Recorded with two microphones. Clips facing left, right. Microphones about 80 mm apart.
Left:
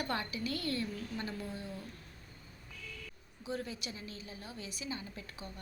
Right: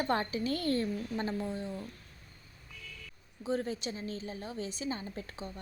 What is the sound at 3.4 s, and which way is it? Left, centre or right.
A woman's voice, right.